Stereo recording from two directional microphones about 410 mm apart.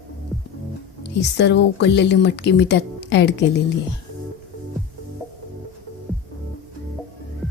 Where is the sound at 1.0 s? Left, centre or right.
Left.